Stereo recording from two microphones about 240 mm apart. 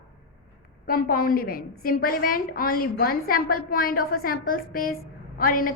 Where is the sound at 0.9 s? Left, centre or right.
Left.